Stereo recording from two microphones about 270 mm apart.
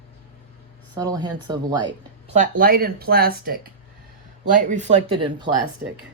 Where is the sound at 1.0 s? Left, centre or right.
Centre.